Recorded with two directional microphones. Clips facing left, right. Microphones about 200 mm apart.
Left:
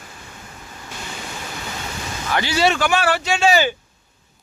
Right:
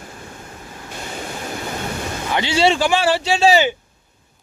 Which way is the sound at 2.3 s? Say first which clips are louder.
Right 2 dB; 25° right (ahead or behind).